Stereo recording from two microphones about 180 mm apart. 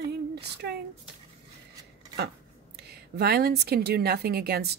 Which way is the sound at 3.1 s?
60° right (ahead or behind).